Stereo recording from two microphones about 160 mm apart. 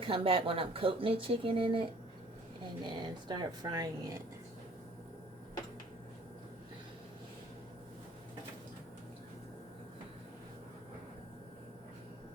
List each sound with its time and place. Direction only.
0.0 s speech: 35° right (ahead or behind)